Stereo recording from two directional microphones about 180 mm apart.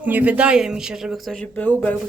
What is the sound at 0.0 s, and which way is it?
Speech, 10° right (ahead or behind).